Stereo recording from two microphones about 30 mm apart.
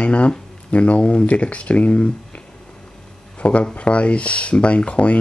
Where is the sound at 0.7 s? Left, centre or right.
Left.